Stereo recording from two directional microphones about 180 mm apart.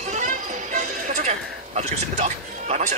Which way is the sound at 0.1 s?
40° right (ahead or behind).